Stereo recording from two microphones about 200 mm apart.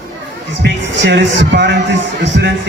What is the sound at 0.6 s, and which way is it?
A man's voice, 60° right (ahead or behind).